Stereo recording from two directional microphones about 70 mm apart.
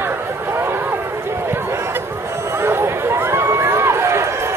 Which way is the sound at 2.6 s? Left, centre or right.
Right.